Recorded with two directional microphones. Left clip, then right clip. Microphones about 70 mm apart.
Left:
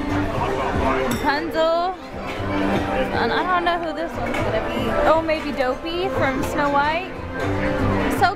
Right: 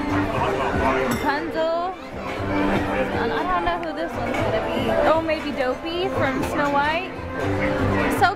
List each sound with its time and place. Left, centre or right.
1.2 s chink: left
3.2 s a woman's voice: left
4.7 s a woman's voice: centre
8.2 s speech: centre